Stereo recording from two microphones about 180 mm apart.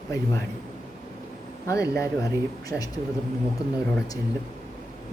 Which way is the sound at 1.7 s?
15° left (ahead or behind).